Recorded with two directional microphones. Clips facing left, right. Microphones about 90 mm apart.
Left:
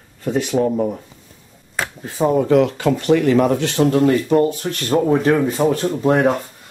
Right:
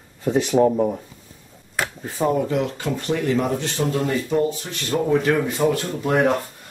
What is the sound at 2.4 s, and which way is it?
Speech, 85° left.